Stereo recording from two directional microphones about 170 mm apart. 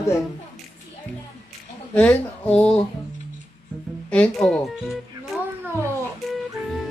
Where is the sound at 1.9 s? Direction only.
5° left (ahead or behind).